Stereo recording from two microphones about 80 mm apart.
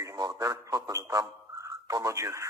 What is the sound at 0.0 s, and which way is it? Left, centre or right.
Speech, right.